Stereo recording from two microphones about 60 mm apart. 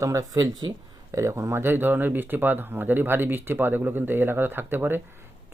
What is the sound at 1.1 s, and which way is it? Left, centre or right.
Speech, right.